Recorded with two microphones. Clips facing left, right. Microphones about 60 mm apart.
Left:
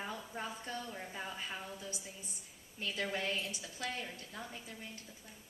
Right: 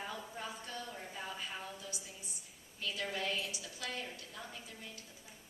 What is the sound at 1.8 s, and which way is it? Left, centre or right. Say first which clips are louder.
A woman's voice: left 2 dB; left.